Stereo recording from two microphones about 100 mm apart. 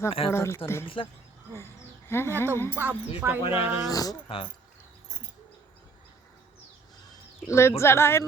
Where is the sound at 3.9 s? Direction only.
40° left (ahead or behind).